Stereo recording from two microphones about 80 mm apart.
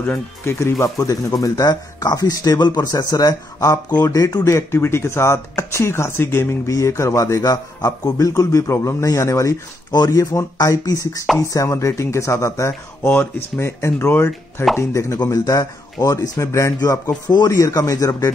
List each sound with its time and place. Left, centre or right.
0.5 s speech: left
2.9 s speech: left
4.6 s speech: left
9.8 s speech: left
15.2 s speech: left
17.5 s speech: left